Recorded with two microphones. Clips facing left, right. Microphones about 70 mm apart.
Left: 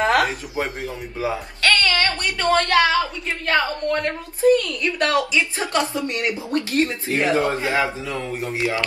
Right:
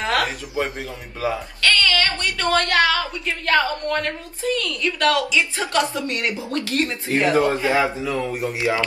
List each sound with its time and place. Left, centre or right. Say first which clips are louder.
0.0 s speech: left 4 dB; left
7.4 s a man's voice: right 2 dB; right